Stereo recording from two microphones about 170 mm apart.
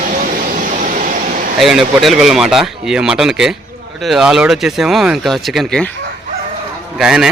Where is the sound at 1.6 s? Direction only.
Centre (ahead or behind).